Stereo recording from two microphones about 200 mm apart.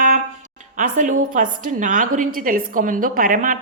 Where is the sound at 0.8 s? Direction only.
40° right (ahead or behind).